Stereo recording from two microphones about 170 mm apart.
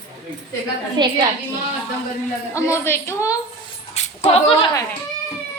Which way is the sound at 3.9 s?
40° left (ahead or behind).